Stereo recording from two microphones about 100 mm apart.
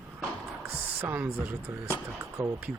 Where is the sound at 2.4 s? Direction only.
40° right (ahead or behind).